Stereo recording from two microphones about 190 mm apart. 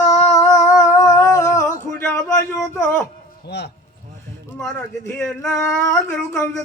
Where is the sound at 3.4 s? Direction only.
60° left (ahead or behind).